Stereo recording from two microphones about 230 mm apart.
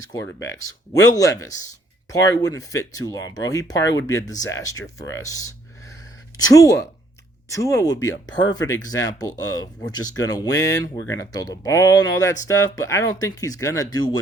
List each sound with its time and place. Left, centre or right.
0.1 s a woman's voice: centre